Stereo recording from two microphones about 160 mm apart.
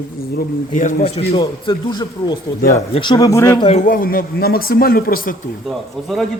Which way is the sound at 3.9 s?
65° left (ahead or behind).